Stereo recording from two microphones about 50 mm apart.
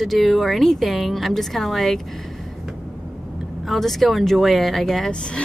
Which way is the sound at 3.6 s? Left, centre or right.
Centre.